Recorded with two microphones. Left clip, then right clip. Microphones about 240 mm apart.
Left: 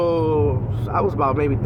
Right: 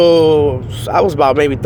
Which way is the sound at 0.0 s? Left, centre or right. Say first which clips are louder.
Right 10 dB; right.